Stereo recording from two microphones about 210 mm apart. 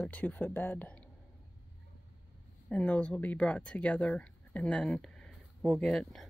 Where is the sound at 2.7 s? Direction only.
5° left (ahead or behind).